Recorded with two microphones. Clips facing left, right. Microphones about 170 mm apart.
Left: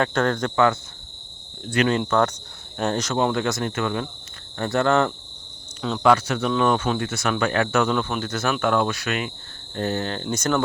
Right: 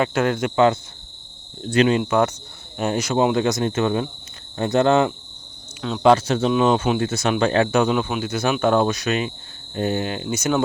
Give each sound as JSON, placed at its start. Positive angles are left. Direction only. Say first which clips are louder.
{"t": 0.0, "sound": "cricket", "louder": "right 2 dB", "side_deg": -10}
{"t": 0.5, "sound": "speech", "louder": "right 3 dB", "side_deg": -20}
{"t": 2.0, "sound": "cricket", "louder": "right 2 dB", "side_deg": -10}
{"t": 4.5, "sound": "speech", "louder": "right 3 dB", "side_deg": -20}
{"t": 6.5, "sound": "cricket", "louder": "right 2 dB", "side_deg": -20}
{"t": 7.0, "sound": "speech", "louder": "right 4 dB", "side_deg": -25}
{"t": 9.7, "sound": "cricket", "louder": "right 2 dB", "side_deg": -15}